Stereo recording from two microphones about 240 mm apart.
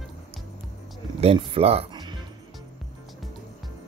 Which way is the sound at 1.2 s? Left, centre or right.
Right.